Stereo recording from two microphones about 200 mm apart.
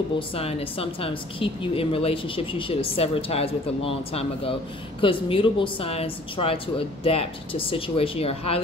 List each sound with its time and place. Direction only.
0.3 s a woman's voice: 30° left (ahead or behind)